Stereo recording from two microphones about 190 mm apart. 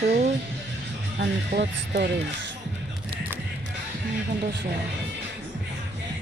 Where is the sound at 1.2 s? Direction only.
60° right (ahead or behind).